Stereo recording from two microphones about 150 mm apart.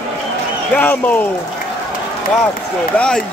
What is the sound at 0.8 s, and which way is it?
Speech, 10° left (ahead or behind).